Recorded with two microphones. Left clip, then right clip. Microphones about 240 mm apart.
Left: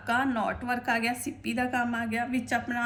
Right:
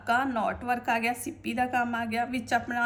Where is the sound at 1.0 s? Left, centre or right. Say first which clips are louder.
Right 1 dB; centre.